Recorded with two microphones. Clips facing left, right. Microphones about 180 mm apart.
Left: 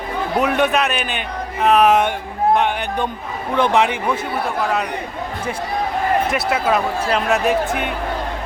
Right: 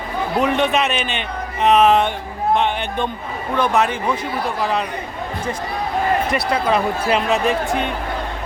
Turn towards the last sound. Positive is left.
turn(degrees=0)  # may be behind; listen again after turning